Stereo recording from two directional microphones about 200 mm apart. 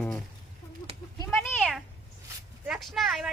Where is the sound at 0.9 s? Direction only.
30° right (ahead or behind).